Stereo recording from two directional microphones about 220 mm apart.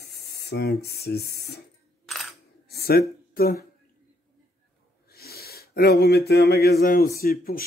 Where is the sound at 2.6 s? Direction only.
45° left (ahead or behind).